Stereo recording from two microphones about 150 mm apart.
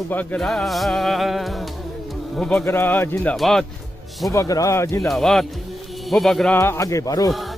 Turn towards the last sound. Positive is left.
turn(degrees=25)  # may be behind; listen again after turning